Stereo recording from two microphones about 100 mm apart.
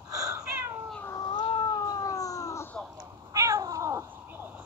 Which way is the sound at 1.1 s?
45° left (ahead or behind).